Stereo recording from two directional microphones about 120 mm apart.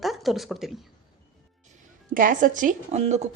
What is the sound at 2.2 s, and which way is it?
A woman's voice, 90° right.